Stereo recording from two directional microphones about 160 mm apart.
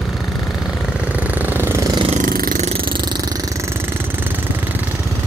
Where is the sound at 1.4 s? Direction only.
15° right (ahead or behind).